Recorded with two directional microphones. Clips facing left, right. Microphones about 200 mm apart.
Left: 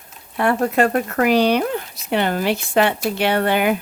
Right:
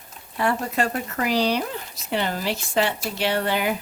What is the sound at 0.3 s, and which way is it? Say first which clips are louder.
Speech: left 6 dB; 60° left (ahead or behind).